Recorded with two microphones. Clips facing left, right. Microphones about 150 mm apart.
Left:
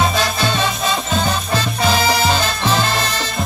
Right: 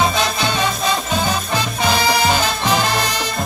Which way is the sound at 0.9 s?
5° right (ahead or behind).